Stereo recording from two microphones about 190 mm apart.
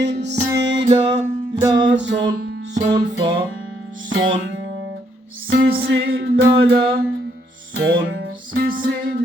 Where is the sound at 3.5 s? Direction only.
90° right.